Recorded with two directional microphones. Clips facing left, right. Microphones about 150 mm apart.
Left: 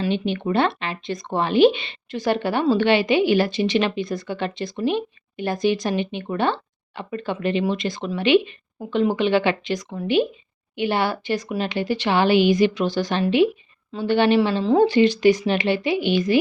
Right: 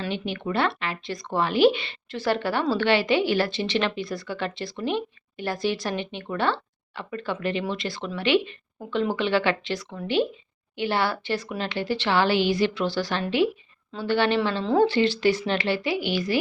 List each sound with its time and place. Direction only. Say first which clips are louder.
0.0 s speech: left 6 dB; 20° left (ahead or behind)